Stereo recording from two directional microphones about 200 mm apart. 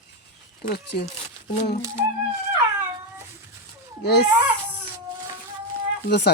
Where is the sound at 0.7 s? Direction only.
55° left (ahead or behind).